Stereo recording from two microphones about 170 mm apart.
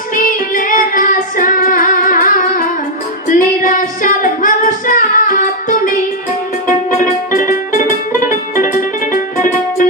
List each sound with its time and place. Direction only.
0.2 s female singing: 55° left (ahead or behind)
6.7 s music: 50° left (ahead or behind)